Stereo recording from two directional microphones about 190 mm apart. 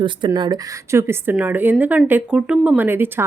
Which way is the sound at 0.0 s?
25° right (ahead or behind).